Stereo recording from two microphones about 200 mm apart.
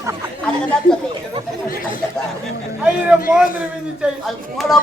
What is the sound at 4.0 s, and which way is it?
Speech, centre (ahead or behind).